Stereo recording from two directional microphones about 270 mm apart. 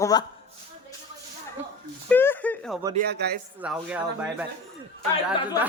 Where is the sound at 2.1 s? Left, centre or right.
Centre.